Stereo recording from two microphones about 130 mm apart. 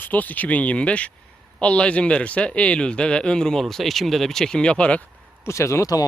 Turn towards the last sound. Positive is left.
turn(degrees=25)  # may be behind; listen again after turning